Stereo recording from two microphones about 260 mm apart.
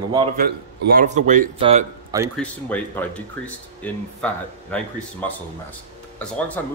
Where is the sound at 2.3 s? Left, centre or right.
Centre.